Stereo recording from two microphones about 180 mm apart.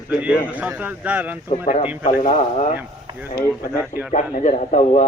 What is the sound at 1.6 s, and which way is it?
A man's voice, 40° left (ahead or behind).